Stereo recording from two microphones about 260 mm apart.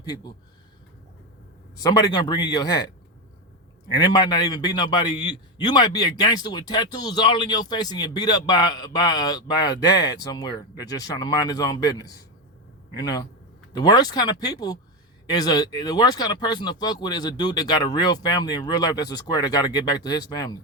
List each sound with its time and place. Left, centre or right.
0.0 s a man's voice: centre
1.8 s a man's voice: centre
3.9 s a man's voice: centre